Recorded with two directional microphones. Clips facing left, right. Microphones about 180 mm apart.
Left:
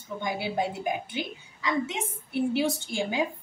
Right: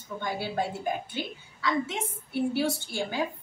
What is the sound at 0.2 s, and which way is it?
A woman's voice, 15° left (ahead or behind).